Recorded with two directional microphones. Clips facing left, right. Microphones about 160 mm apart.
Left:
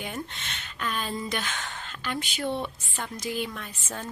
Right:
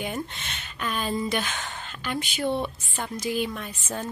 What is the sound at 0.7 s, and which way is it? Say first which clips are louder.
Speech: right 3 dB; 10° right (ahead or behind).